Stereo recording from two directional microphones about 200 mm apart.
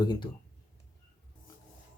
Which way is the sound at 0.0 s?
20° left (ahead or behind).